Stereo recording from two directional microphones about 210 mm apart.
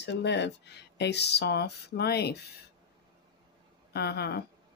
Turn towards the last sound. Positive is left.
turn(degrees=50)  # may be behind; listen again after turning